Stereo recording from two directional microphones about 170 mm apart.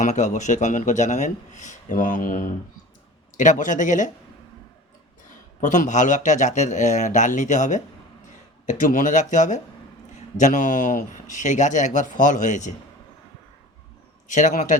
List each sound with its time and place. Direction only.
0.0 s speech: 45° left (ahead or behind)
5.5 s speech: 50° left (ahead or behind)
14.3 s speech: 45° left (ahead or behind)